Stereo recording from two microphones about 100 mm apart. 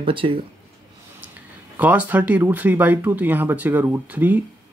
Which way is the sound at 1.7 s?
15° right (ahead or behind).